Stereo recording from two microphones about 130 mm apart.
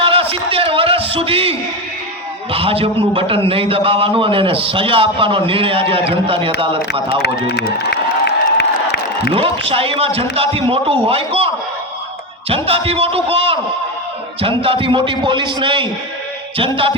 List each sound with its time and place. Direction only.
0.0 s a sound: 45° right (ahead or behind)
2.5 s a man's voice: 45° right (ahead or behind)
9.3 s a man's voice: 45° right (ahead or behind)
14.6 s a man's voice: 45° right (ahead or behind)